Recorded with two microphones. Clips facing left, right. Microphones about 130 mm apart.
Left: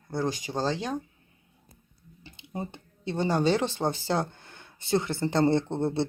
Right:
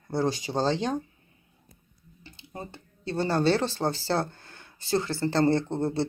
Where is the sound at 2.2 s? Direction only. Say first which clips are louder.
Left 4 dB; 20° left (ahead or behind).